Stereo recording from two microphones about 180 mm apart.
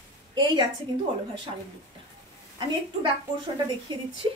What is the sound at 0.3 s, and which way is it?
Speech, 25° right (ahead or behind).